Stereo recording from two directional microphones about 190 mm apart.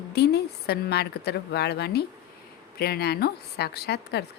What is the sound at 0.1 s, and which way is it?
Speech, 60° left (ahead or behind).